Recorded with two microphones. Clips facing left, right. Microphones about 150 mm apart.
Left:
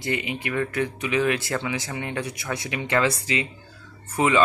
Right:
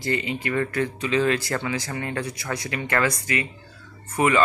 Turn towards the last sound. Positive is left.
turn(degrees=15)  # may be behind; listen again after turning